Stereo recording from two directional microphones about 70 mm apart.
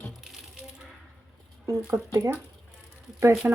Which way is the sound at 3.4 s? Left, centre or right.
Right.